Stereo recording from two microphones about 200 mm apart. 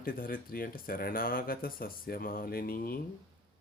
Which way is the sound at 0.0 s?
45° left (ahead or behind).